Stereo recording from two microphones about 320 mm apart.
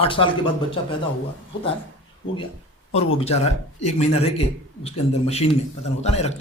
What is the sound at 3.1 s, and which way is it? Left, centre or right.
A man's voice, centre.